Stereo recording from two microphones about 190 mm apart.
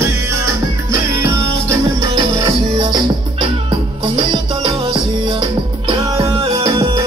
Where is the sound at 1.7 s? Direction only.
20° right (ahead or behind).